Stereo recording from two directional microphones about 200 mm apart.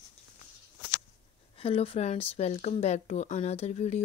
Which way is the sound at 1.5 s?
30° left (ahead or behind).